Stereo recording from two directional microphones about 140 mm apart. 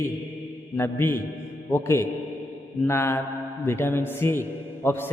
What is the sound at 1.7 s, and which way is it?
Mantra, 20° left (ahead or behind).